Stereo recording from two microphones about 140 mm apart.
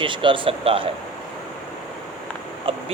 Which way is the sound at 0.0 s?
35° right (ahead or behind).